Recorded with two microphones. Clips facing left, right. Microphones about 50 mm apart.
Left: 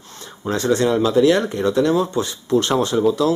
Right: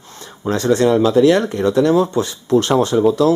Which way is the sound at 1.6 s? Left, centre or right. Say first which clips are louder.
Right 3 dB; right.